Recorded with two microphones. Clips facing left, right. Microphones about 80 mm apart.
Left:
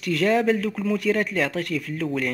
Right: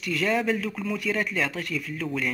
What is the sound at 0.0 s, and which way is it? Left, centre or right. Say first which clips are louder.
Speech: left 5 dB; left.